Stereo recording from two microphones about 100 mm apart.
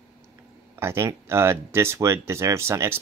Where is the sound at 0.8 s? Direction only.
25° right (ahead or behind).